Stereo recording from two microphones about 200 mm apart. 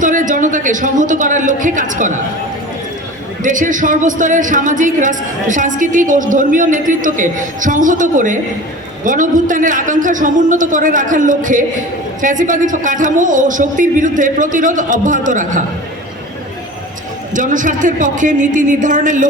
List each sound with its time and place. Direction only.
0.0 s speech: 40° right (ahead or behind)
3.4 s speech: 40° right (ahead or behind)
17.3 s speech: 40° right (ahead or behind)